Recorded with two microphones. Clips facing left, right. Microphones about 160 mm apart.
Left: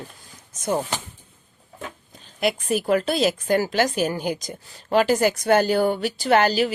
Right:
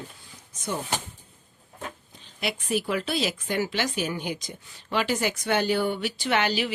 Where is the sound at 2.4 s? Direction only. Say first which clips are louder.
Left 5 dB; 45° left (ahead or behind).